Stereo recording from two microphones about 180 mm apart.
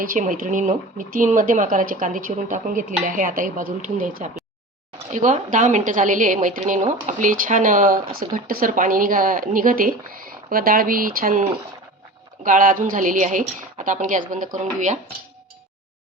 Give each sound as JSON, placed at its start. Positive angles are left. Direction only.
{"t": 0.0, "sound": "speech", "side_deg": -50}